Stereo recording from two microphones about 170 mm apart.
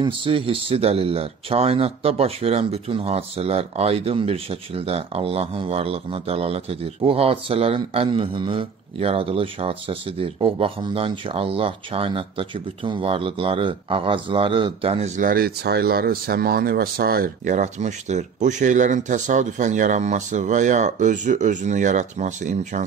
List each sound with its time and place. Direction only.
0.0 s speech: 30° right (ahead or behind)